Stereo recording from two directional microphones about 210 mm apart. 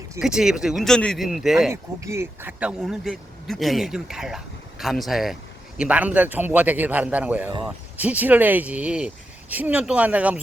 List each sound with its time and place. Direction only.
0.2 s speech: 5° right (ahead or behind)
1.7 s speech: 15° right (ahead or behind)